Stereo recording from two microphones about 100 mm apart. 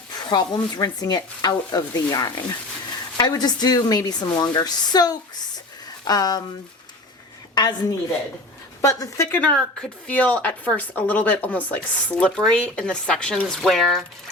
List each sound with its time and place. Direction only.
0.3 s speech: 45° left (ahead or behind)
7.5 s a woman's voice: 45° left (ahead or behind); by 9.4 s 25° left (ahead or behind)
9.4 s speech: 10° left (ahead or behind)